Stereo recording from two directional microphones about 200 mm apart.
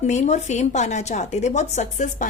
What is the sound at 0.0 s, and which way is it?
A woman's voice, 35° left (ahead or behind).